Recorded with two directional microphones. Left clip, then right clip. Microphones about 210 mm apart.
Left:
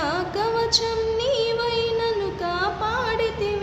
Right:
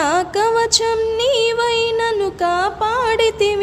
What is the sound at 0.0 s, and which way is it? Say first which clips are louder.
Music: right 8 dB; 45° right (ahead or behind).